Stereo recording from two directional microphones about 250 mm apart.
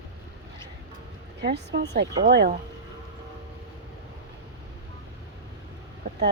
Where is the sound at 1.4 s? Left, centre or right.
Right.